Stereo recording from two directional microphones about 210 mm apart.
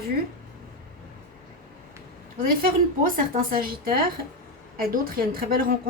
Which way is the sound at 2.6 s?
45° right (ahead or behind).